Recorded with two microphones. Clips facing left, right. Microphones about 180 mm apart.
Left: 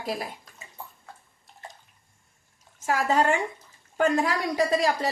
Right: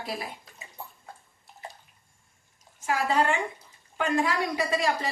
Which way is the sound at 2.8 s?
45° left (ahead or behind).